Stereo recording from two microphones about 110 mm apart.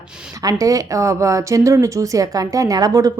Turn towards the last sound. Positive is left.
turn(degrees=-35)  # may be behind; listen again after turning